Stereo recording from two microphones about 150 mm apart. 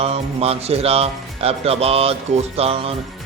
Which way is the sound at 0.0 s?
45° right (ahead or behind).